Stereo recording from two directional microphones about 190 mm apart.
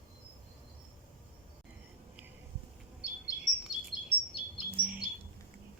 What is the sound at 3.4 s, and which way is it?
Bird vocalization, 5° right (ahead or behind).